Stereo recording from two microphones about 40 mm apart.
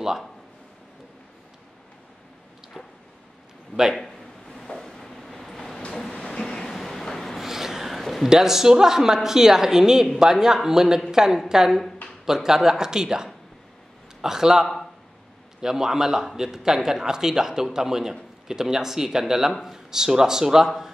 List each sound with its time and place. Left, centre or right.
4.9 s vehicle: centre
7.3 s a sound: centre
8.3 s a man's voice: centre